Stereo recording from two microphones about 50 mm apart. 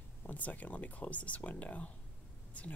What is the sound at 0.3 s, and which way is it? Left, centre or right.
Speech, left.